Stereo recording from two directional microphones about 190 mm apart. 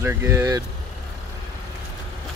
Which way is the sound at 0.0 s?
15° right (ahead or behind).